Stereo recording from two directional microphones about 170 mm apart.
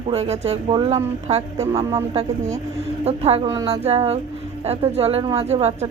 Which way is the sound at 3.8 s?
40° right (ahead or behind).